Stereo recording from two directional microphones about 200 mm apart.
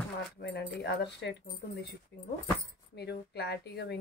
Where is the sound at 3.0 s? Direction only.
55° left (ahead or behind).